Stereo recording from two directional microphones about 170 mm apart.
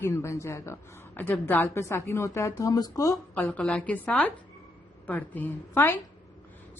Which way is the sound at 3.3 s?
10° left (ahead or behind).